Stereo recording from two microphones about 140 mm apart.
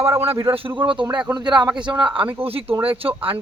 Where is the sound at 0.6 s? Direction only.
35° right (ahead or behind).